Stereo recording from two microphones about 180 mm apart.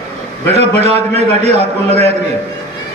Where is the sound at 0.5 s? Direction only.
35° right (ahead or behind).